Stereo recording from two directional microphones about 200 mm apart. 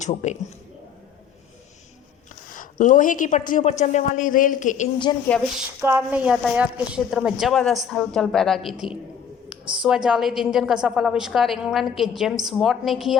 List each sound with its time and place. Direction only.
0.0 s a woman's voice: 35° left (ahead or behind)
2.5 s a woman's voice: 40° left (ahead or behind)
5.1 s a woman's voice: 25° left (ahead or behind)
5.5 s a woman's voice: 10° right (ahead or behind)
9.8 s a woman's voice: 5° right (ahead or behind)